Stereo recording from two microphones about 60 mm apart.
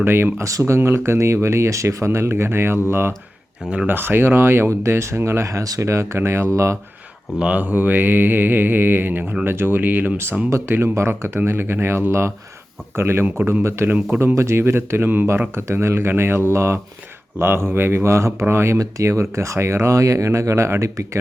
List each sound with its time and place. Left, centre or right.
0.0 s mantra: right
0.4 s speech: right
3.8 s mantra: right
4.7 s speech: right
7.3 s speech: centre
7.6 s mantra: right
11.4 s speech: right
18.8 s speech: right